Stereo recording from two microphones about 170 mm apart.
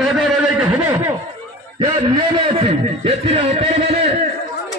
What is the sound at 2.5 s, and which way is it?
Speech, 35° right (ahead or behind).